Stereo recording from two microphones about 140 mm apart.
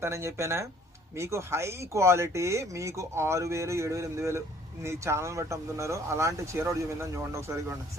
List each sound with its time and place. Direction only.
0.0 s speech: 20° right (ahead or behind)